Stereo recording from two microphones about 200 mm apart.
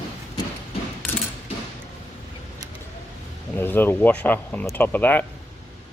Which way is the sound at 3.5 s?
10° left (ahead or behind).